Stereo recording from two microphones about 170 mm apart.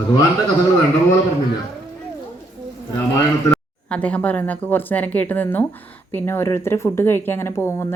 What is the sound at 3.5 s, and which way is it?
Speech, 5° left (ahead or behind).